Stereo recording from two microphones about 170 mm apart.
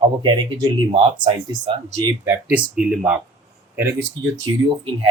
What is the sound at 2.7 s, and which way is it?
Speech, 5° right (ahead or behind).